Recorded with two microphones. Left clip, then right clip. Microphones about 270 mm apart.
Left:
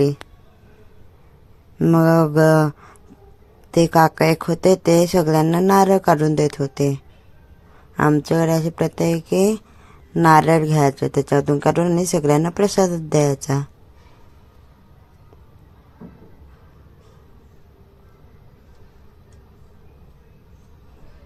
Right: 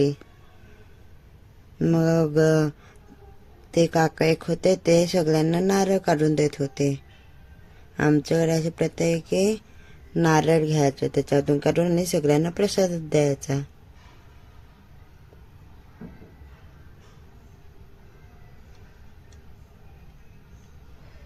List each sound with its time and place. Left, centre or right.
1.8 s speech: centre